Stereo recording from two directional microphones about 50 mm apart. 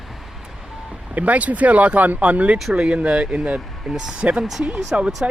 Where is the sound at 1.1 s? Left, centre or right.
Right.